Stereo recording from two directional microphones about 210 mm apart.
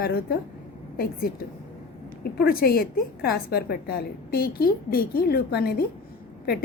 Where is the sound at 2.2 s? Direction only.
45° left (ahead or behind).